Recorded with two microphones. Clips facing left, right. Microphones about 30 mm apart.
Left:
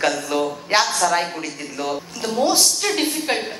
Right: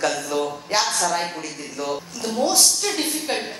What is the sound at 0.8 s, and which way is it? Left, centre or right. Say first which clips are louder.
Speech: left 3 dB; centre.